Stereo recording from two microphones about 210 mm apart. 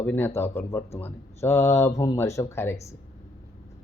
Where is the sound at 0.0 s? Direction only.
10° left (ahead or behind).